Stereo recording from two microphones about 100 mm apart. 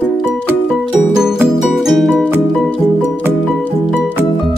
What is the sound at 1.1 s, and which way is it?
Music, 5° right (ahead or behind).